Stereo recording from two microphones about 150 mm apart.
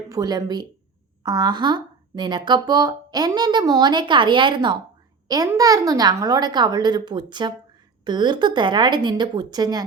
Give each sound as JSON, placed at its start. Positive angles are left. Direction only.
{"t": 0.1, "sound": "a woman's voice", "side_deg": -25}